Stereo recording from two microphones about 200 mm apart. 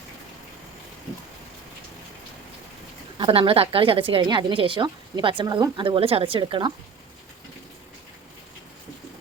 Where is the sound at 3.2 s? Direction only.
25° right (ahead or behind).